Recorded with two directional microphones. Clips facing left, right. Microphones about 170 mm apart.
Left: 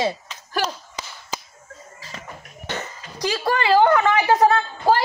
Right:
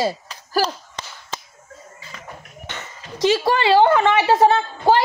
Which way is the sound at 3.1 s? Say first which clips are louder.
Right 5 dB; 25° right (ahead or behind).